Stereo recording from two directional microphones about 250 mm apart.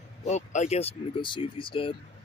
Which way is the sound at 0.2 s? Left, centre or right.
Left.